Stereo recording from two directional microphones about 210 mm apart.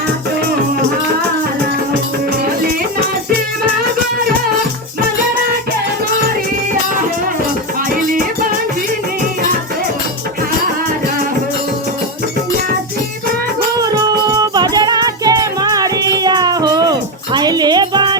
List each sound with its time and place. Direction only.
13.8 s music: 20° right (ahead or behind)